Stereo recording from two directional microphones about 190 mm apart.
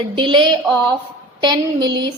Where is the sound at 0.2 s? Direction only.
25° right (ahead or behind).